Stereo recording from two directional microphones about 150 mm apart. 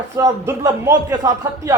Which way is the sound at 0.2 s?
20° right (ahead or behind).